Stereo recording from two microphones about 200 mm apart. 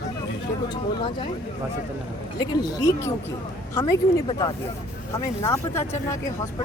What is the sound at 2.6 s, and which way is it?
Speech, 20° left (ahead or behind).